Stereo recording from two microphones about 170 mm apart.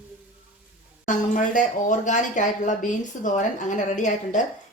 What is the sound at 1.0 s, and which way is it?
Speech, 50° left (ahead or behind).